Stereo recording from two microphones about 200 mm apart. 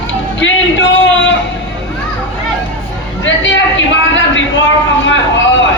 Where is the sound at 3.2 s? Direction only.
65° left (ahead or behind).